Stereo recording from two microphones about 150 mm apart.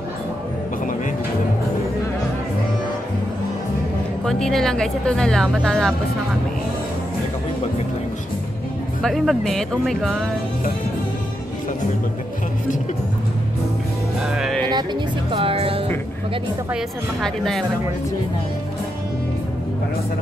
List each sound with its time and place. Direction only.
4.2 s speech: 5° left (ahead or behind)
9.0 s speech: centre (ahead or behind)
14.2 s music: 5° right (ahead or behind)
15.3 s speech: 40° right (ahead or behind)
16.7 s speech: centre (ahead or behind)